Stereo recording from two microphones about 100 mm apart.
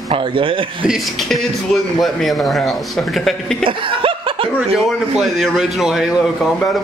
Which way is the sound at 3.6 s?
60° right (ahead or behind).